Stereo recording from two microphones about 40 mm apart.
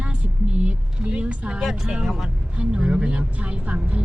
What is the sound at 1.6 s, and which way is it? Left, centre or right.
Speech, centre.